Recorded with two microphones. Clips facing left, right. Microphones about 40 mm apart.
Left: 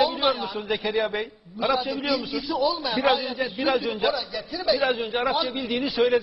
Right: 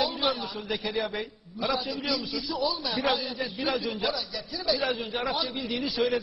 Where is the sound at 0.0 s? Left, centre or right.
Centre.